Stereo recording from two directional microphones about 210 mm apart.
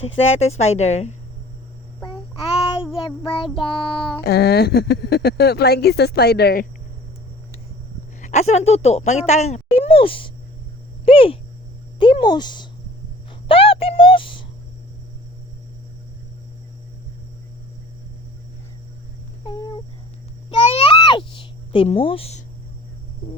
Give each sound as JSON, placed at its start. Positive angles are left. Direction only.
{"t": 0.3, "sound": "a woman's voice", "side_deg": 30}
{"t": 2.6, "sound": "child singing", "side_deg": 25}
{"t": 4.2, "sound": "speech", "side_deg": 50}
{"t": 8.2, "sound": "a woman's voice", "side_deg": 35}
{"t": 11.0, "sound": "a sound", "side_deg": 25}
{"t": 11.9, "sound": "speech", "side_deg": 25}
{"t": 13.5, "sound": "a sound", "side_deg": 25}
{"t": 19.5, "sound": "cat", "side_deg": 20}
{"t": 20.5, "sound": "a sound", "side_deg": 25}